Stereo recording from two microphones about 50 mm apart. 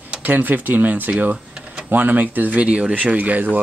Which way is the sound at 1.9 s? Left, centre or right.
Right.